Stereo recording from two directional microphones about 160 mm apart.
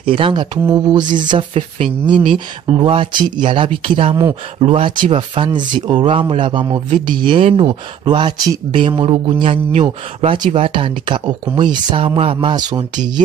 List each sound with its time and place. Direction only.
0.0 s speech: 35° right (ahead or behind)